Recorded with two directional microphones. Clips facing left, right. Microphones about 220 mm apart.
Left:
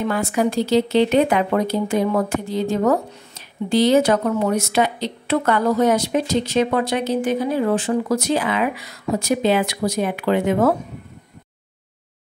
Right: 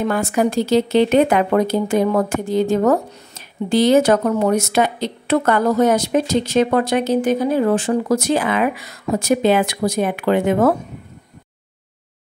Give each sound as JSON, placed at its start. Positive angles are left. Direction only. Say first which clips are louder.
{"t": 0.1, "sound": "speech", "louder": "right 2 dB", "side_deg": -45}